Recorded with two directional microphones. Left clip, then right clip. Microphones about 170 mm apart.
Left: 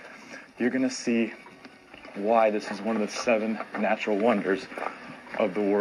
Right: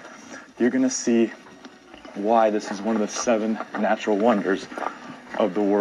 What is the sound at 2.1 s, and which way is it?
Speech, 15° left (ahead or behind).